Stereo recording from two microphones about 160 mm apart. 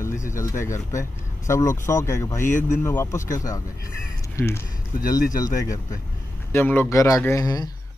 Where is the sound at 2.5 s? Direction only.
50° left (ahead or behind).